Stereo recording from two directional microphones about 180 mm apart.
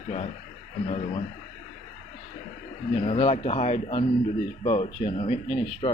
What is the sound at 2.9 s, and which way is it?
Speech, 35° left (ahead or behind).